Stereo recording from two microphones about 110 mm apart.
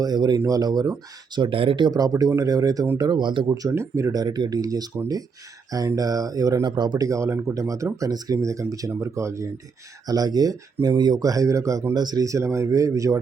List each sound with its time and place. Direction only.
0.0 s speech: 40° right (ahead or behind)
3.5 s speech: 30° right (ahead or behind)